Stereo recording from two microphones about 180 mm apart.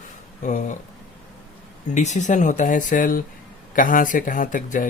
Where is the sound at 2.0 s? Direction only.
40° left (ahead or behind).